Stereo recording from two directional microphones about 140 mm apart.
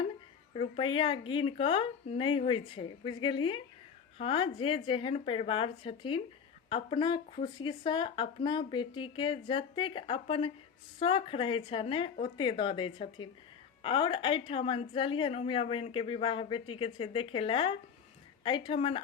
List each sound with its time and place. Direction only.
0.5 s a woman's voice: 40° left (ahead or behind)